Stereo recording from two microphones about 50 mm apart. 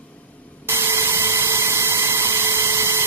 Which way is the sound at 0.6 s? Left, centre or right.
Right.